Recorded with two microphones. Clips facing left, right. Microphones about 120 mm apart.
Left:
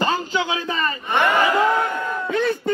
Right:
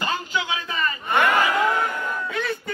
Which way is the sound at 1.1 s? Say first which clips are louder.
Left 1 dB; centre (ahead or behind).